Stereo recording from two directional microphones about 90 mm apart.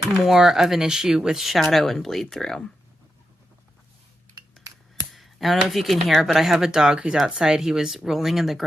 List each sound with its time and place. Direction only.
0.3 s speech: 5° right (ahead or behind)
5.1 s speech: centre (ahead or behind)